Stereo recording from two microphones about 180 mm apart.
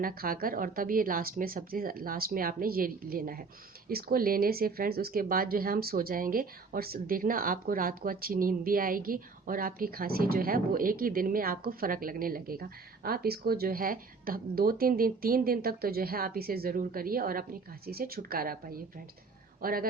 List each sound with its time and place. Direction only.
0.0 s speech: 55° right (ahead or behind)